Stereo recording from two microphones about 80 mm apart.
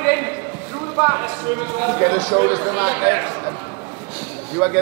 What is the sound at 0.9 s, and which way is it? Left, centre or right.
A man's voice, right.